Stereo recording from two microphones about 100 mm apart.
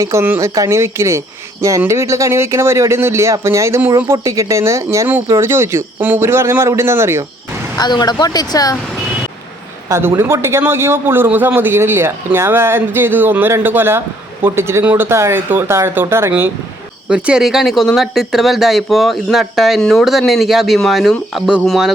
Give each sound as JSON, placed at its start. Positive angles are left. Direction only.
{"t": 0.0, "sound": "a man's voice", "side_deg": -25}
{"t": 7.8, "sound": "speech", "side_deg": 45}
{"t": 9.9, "sound": "a man's voice", "side_deg": -25}
{"t": 17.1, "sound": "speech", "side_deg": -10}